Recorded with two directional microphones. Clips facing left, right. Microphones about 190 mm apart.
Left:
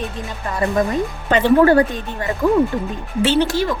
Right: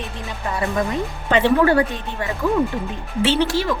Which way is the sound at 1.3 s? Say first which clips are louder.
Left 3 dB; 45° left (ahead or behind).